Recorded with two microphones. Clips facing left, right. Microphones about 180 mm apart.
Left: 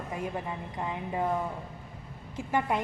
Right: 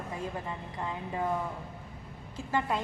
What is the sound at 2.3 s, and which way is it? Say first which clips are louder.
Speech: left 2 dB; 20° left (ahead or behind).